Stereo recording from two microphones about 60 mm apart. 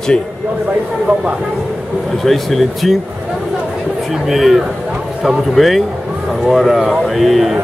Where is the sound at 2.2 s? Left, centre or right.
Centre.